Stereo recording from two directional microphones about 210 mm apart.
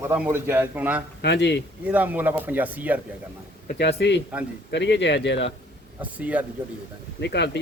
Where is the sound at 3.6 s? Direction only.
50° left (ahead or behind).